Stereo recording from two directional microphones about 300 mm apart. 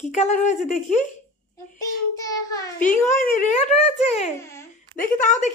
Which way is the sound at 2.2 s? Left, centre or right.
Centre.